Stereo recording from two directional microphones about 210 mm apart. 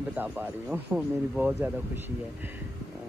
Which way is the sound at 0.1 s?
10° right (ahead or behind).